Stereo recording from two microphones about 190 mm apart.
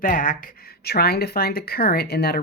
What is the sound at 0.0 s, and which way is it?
Speech, 45° left (ahead or behind).